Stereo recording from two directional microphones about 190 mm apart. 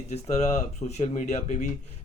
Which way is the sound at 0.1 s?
35° left (ahead or behind).